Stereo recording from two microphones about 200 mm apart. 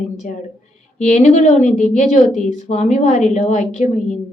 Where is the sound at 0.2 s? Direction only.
40° left (ahead or behind).